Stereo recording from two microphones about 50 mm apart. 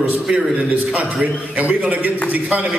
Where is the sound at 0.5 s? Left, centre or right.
Right.